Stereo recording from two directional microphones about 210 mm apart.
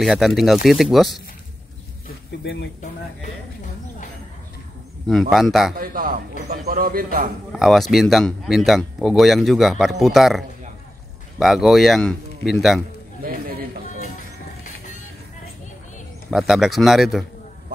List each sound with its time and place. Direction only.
0.0 s speech: centre (ahead or behind)
2.4 s speech: 55° left (ahead or behind)
5.0 s speech: centre (ahead or behind)
5.8 s a man's voice: 40° right (ahead or behind)
7.5 s speech: centre (ahead or behind)
13.2 s a sound: 40° right (ahead or behind)
16.3 s speech: centre (ahead or behind)